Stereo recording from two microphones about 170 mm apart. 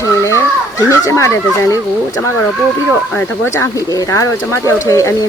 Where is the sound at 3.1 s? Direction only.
15° left (ahead or behind).